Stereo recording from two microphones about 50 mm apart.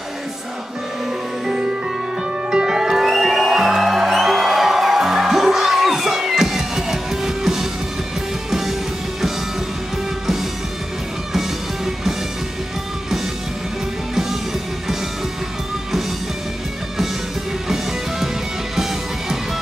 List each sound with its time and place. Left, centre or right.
2.5 s music: centre
11.3 s music: centre